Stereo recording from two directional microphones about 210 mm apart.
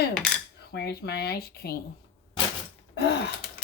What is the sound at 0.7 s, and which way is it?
Speech, 50° left (ahead or behind).